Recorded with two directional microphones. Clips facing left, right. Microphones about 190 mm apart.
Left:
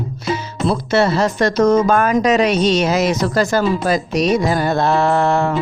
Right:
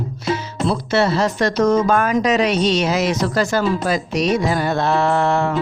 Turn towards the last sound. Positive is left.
turn(degrees=40)  # may be behind; listen again after turning